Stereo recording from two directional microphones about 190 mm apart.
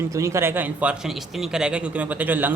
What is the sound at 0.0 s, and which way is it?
A man's voice, 15° right (ahead or behind).